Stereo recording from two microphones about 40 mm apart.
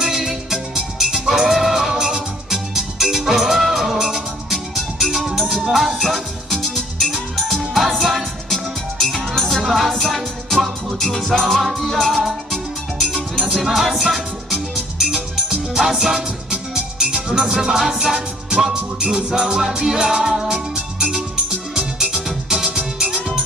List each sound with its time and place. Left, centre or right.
0.0 s music: centre
6.0 s music: centre
11.0 s music: centre
11.6 s music: centre
13.6 s music: centre
15.7 s music: centre